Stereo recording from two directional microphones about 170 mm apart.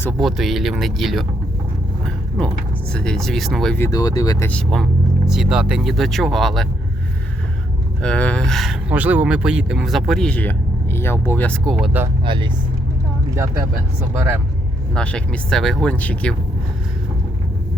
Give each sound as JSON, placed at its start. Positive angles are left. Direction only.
{"t": 0.0, "sound": "speech", "side_deg": 5}
{"t": 2.9, "sound": "speech", "side_deg": 5}
{"t": 3.8, "sound": "speech", "side_deg": 20}
{"t": 4.4, "sound": "speech", "side_deg": 5}
{"t": 8.0, "sound": "speech", "side_deg": 5}
{"t": 12.2, "sound": "speech", "side_deg": -30}
{"t": 14.9, "sound": "speech", "side_deg": 5}